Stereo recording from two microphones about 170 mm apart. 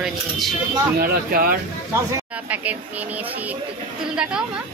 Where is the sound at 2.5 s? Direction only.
10° right (ahead or behind).